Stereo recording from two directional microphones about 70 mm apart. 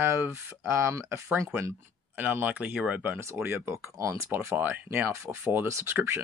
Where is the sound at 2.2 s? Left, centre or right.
Right.